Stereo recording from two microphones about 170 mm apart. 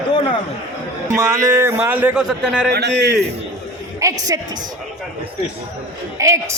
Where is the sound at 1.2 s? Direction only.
20° right (ahead or behind).